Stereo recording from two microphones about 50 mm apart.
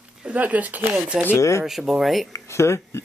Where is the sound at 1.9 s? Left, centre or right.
Centre.